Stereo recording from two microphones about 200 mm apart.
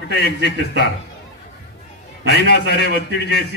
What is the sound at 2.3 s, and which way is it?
A man's voice, 55° left (ahead or behind).